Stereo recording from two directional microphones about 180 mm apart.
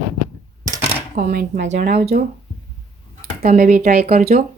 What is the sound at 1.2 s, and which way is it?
Speech, 55° right (ahead or behind).